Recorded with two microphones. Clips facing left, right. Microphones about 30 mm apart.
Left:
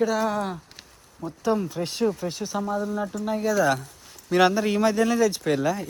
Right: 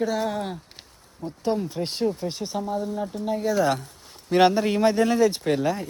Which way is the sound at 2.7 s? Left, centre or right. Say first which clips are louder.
Left 1 dB; right.